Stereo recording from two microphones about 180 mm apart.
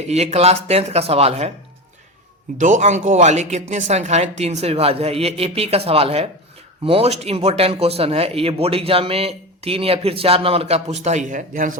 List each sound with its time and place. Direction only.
0.1 s speech: 35° right (ahead or behind)
2.6 s speech: 45° right (ahead or behind)